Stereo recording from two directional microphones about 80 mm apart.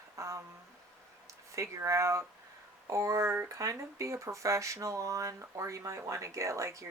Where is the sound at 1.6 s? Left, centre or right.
Right.